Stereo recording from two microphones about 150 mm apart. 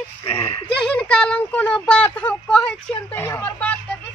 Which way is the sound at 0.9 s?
5° left (ahead or behind).